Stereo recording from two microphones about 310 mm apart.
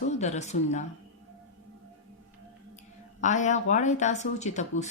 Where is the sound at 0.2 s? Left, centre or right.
Left.